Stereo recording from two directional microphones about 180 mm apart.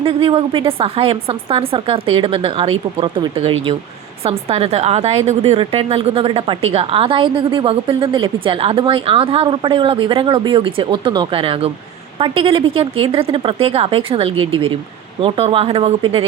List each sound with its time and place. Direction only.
0.0 s a woman's voice: 30° right (ahead or behind)